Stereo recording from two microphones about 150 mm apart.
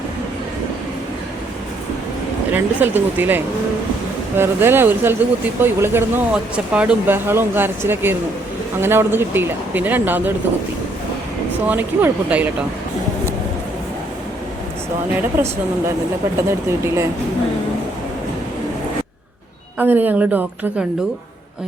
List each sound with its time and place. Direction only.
2.5 s speech: 10° right (ahead or behind)
11.7 s speech: 10° right (ahead or behind)
15.4 s speech: 15° right (ahead or behind)
19.8 s speech: 10° right (ahead or behind)